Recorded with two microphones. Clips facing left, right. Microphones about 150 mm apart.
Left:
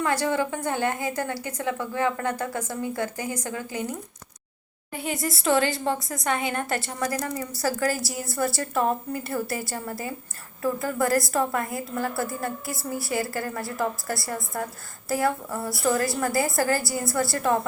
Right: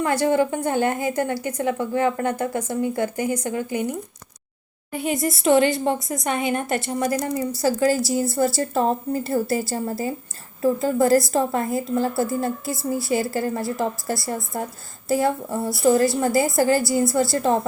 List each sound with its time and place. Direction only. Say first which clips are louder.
0.0 s a woman's voice: right 5 dB; 25° right (ahead or behind)
4.9 s a woman's voice: right 6 dB; 20° right (ahead or behind)